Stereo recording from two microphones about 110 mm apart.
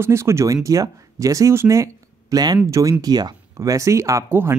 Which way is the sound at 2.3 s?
35° right (ahead or behind).